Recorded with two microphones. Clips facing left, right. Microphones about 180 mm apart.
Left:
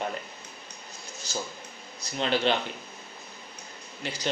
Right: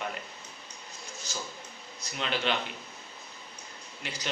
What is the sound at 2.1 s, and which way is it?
Speech, 35° left (ahead or behind).